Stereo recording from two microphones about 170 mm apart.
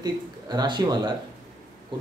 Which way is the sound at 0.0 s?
25° right (ahead or behind).